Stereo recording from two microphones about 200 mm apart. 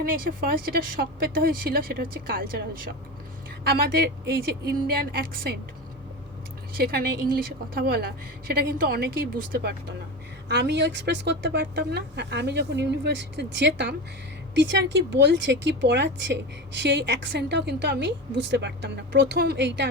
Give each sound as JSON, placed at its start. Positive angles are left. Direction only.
{"t": 0.0, "sound": "a woman's voice", "side_deg": -45}
{"t": 6.7, "sound": "a woman's voice", "side_deg": -50}